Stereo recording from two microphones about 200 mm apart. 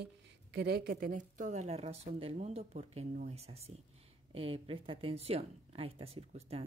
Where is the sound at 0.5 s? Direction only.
50° right (ahead or behind).